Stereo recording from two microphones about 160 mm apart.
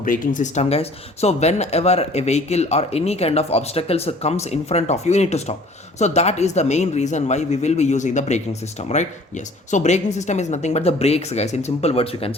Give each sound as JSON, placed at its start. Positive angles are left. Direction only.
{"t": 0.0, "sound": "speech", "side_deg": 55}